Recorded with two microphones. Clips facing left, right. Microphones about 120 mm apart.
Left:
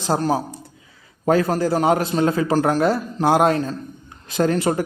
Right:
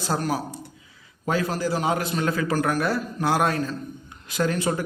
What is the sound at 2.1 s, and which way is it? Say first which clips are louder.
A man's voice: left 6 dB; 30° left (ahead or behind).